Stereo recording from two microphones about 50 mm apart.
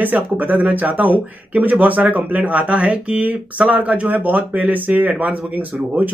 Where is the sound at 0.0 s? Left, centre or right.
Right.